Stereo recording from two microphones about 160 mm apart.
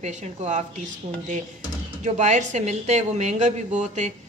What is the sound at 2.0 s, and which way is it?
Speech, 50° right (ahead or behind).